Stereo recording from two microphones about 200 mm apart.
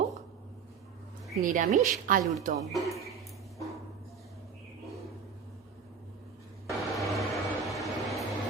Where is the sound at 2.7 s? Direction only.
Centre (ahead or behind).